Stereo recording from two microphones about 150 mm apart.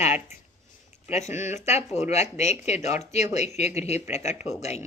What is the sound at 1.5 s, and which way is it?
Speech, 45° left (ahead or behind).